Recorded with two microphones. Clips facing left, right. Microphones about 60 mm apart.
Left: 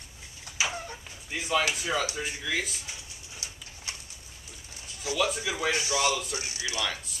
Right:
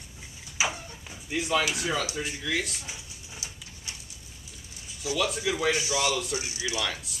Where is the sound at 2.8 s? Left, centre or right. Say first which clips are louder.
Right 1 dB; centre.